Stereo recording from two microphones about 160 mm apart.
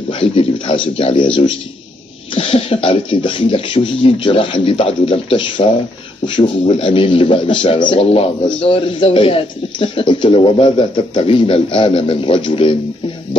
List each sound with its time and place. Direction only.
0.1 s a man's voice: 35° left (ahead or behind)
2.3 s a man's voice: 35° left (ahead or behind)